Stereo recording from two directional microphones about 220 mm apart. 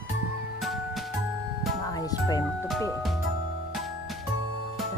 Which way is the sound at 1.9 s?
15° left (ahead or behind).